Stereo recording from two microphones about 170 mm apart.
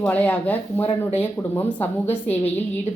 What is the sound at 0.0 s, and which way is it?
A woman's voice, 10° left (ahead or behind).